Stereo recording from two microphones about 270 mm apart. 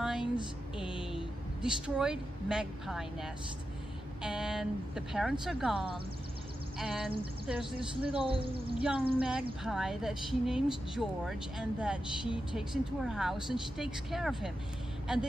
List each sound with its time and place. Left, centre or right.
0.0 s a sound: centre
1.1 s a woman's voice: centre
8.3 s speech: centre
8.7 s a woman's voice: centre